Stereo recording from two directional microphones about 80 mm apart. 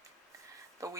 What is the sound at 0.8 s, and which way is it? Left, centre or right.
Speech, right.